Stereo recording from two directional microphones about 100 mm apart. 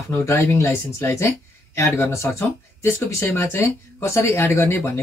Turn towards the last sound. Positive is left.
turn(degrees=20)  # may be behind; listen again after turning